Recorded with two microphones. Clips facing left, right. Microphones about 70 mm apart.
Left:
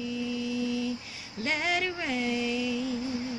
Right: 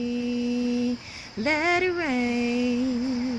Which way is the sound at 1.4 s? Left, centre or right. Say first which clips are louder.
Right 6 dB; right.